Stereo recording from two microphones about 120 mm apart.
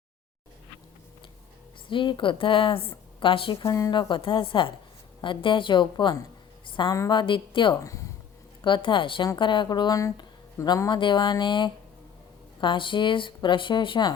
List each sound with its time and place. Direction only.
1.9 s a woman's voice: 45° left (ahead or behind)
3.6 s a woman's voice: 30° left (ahead or behind)
3.9 s a woman's voice: 45° left (ahead or behind)
7.8 s speech: 25° left (ahead or behind)
8.6 s speech: 40° left (ahead or behind)